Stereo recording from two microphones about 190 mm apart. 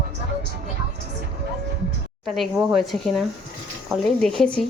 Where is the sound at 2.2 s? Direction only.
Centre (ahead or behind).